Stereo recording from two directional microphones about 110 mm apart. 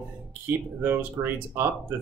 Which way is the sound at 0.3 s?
20° right (ahead or behind).